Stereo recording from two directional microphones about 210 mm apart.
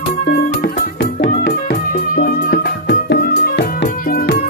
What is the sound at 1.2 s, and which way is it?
Music, 45° left (ahead or behind).